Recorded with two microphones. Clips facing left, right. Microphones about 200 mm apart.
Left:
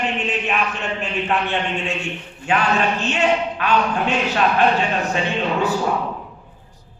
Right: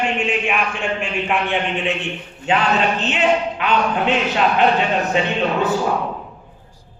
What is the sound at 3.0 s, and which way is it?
Speech, 20° right (ahead or behind).